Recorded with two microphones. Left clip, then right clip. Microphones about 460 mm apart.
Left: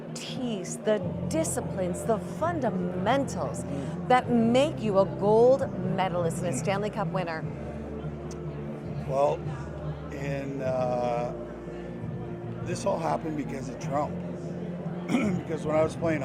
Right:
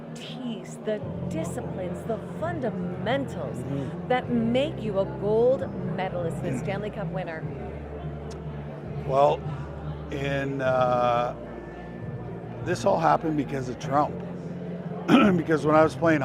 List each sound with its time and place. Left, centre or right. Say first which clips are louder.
0.4 s a woman's voice: left 4 dB; left
9.1 s speech: right 4 dB; right
12.6 s speech: right 7 dB; right
15.1 s speech: right 10 dB; right